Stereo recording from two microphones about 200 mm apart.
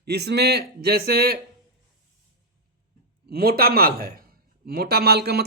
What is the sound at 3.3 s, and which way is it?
A man's voice, 50° right (ahead or behind).